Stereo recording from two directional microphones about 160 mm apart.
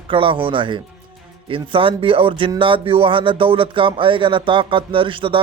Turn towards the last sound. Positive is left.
turn(degrees=-30)  # may be behind; listen again after turning